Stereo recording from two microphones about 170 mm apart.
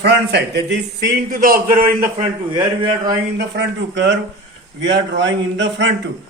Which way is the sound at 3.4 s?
90° right.